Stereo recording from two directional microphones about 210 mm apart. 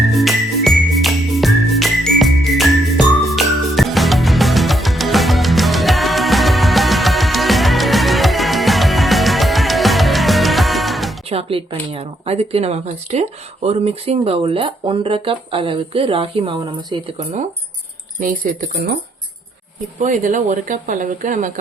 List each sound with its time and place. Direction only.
0.2 s music: centre (ahead or behind)
11.3 s speech: 25° right (ahead or behind)
18.2 s speech: 40° right (ahead or behind)
20.0 s speech: 35° right (ahead or behind)